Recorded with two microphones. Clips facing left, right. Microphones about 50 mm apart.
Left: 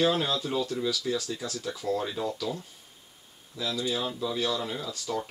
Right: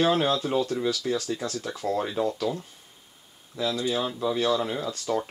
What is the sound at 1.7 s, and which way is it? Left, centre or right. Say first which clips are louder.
Speech: right 2 dB; right.